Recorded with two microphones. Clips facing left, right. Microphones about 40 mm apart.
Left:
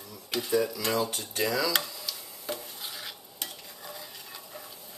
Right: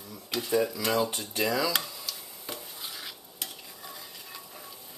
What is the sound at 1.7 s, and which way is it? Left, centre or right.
Tick-tock, centre.